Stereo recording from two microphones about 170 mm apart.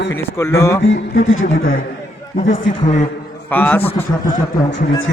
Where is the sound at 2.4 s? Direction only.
90° left.